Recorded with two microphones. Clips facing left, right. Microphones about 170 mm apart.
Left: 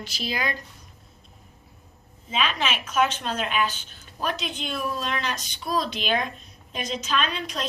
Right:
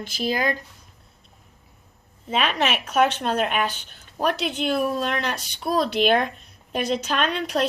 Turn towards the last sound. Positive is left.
turn(degrees=-65)  # may be behind; listen again after turning